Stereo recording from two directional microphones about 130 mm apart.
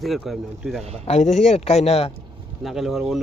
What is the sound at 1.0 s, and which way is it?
Speech, 60° left (ahead or behind).